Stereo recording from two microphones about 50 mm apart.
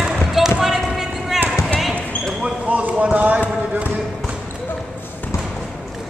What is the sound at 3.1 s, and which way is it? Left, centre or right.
Clip-clop, right.